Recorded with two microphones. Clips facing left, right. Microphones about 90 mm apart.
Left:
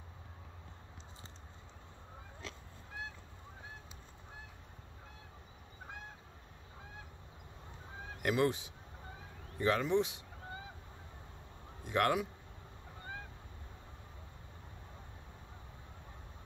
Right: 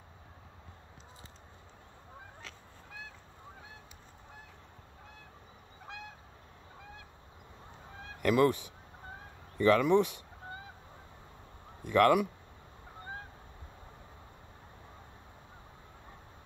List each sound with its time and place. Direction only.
5.9 s goose: 80° right
8.2 s speech: 55° right (ahead or behind)
11.8 s speech: 55° right (ahead or behind)